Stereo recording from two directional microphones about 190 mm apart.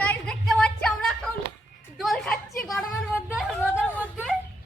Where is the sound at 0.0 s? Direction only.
5° left (ahead or behind).